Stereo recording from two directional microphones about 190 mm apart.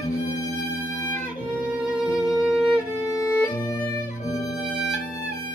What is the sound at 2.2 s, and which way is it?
Music, 5° right (ahead or behind).